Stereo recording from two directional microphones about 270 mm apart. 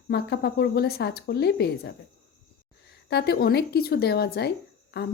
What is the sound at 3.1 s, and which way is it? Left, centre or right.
A woman's voice, left.